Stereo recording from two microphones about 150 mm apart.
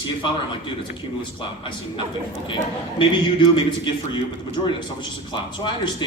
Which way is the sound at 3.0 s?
35° left (ahead or behind).